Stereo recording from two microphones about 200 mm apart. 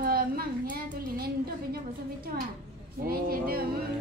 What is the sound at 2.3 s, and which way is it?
Speech, 45° right (ahead or behind).